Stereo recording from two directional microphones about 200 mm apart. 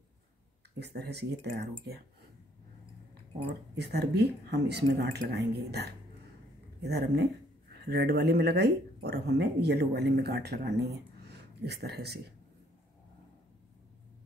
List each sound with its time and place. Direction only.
0.7 s speech: 55° right (ahead or behind)
3.7 s speech: 55° right (ahead or behind)
11.2 s a sound: 55° right (ahead or behind)